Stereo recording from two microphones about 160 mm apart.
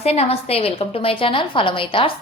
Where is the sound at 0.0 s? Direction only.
40° left (ahead or behind).